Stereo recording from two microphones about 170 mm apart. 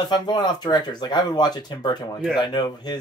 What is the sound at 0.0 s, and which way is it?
Speech, 25° left (ahead or behind).